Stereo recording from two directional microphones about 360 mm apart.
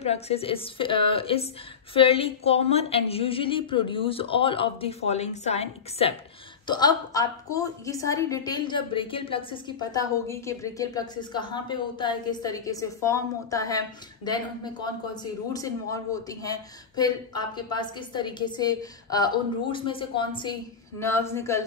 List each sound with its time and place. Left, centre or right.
0.0 s a woman's voice: centre